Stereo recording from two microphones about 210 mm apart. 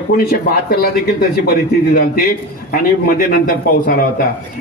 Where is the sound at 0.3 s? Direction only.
45° left (ahead or behind).